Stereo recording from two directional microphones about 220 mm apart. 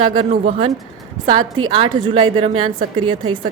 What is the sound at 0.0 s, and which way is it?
A woman's voice, 20° right (ahead or behind).